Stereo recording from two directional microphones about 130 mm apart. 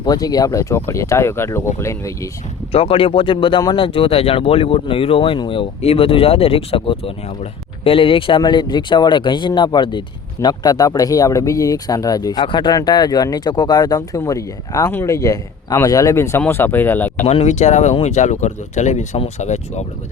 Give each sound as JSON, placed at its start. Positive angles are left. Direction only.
{"t": 0.0, "sound": "speech", "side_deg": 30}
{"t": 2.7, "sound": "speech", "side_deg": 45}
{"t": 17.2, "sound": "speech", "side_deg": 60}